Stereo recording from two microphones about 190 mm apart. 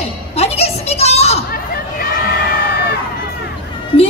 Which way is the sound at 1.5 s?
50° left (ahead or behind).